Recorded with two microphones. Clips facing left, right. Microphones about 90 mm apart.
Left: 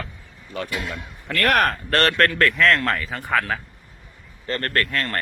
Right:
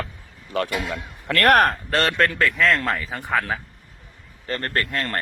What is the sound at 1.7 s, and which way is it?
Speech, 10° right (ahead or behind).